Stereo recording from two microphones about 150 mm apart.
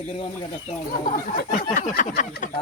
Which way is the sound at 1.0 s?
65° left (ahead or behind).